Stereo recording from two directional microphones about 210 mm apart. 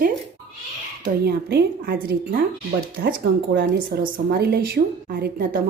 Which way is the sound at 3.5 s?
50° right (ahead or behind).